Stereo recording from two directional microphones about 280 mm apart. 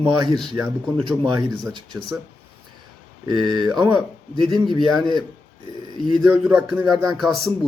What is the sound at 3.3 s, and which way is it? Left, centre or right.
Speech, centre.